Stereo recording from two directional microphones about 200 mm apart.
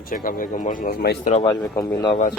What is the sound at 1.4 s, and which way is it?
Speech, 15° left (ahead or behind).